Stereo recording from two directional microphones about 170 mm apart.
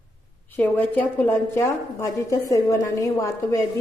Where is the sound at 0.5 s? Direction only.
10° left (ahead or behind).